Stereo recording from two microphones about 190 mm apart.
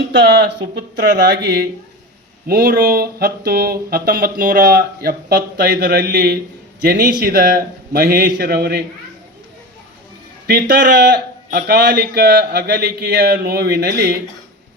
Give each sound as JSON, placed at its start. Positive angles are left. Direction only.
{"t": 0.1, "sound": "speech", "side_deg": -70}
{"t": 0.9, "sound": "speech", "side_deg": -55}
{"t": 10.4, "sound": "speech", "side_deg": -50}